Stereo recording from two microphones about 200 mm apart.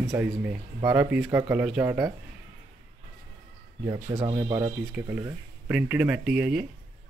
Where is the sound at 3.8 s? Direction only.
25° right (ahead or behind); by 6.7 s 5° right (ahead or behind).